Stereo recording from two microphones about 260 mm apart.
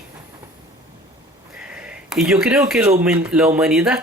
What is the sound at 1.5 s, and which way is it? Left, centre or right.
Speech, centre.